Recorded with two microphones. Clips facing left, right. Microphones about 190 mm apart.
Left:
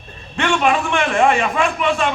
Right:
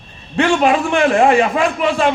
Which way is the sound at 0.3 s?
35° right (ahead or behind).